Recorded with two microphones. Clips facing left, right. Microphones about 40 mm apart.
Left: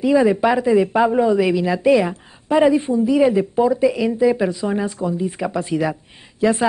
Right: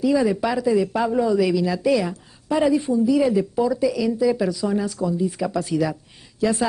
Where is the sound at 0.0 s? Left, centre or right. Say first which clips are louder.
Left 4 dB; left.